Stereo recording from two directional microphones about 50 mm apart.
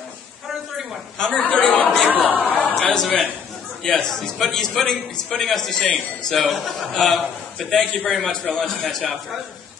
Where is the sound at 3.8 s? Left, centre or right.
Centre.